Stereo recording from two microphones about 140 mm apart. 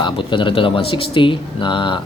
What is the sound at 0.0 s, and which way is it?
Speech, 35° left (ahead or behind).